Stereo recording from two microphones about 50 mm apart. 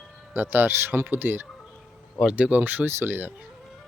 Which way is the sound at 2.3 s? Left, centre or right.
Right.